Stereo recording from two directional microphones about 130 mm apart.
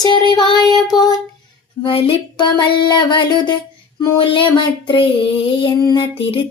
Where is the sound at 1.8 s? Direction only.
45° left (ahead or behind).